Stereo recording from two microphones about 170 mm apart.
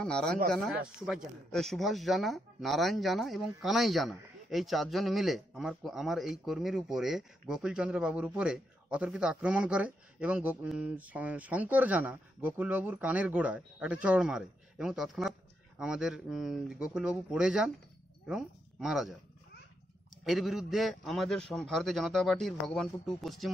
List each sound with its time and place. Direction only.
0.0 s speech: 5° left (ahead or behind)
20.2 s speech: centre (ahead or behind)